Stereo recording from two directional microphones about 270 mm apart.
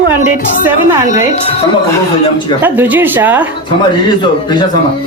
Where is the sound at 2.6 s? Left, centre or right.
Centre.